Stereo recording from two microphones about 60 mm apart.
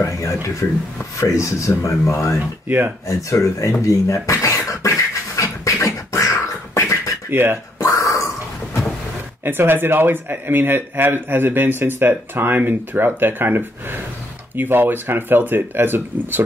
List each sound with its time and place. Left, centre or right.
0.0 s speech: left
4.1 s beatboxing: left
7.2 s speech: right
7.8 s a sound: left
9.4 s speech: right